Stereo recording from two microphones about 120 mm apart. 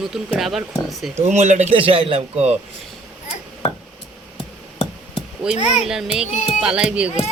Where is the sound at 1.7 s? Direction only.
50° right (ahead or behind).